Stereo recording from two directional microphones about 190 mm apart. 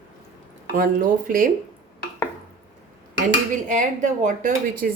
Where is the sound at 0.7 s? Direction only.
50° right (ahead or behind).